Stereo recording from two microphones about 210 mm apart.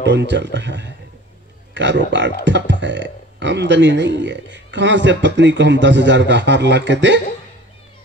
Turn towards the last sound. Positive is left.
turn(degrees=-55)  # may be behind; listen again after turning